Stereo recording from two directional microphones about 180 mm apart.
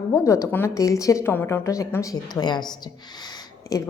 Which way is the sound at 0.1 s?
15° left (ahead or behind).